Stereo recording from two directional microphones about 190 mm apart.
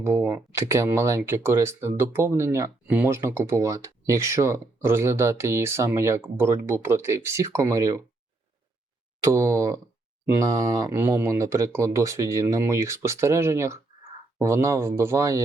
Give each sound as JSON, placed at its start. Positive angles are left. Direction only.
{"t": 0.0, "sound": "speech", "side_deg": -15}
{"t": 9.2, "sound": "speech", "side_deg": -15}